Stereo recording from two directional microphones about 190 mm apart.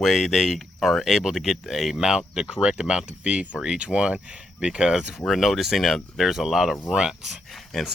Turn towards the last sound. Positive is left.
turn(degrees=0)  # may be behind; listen again after turning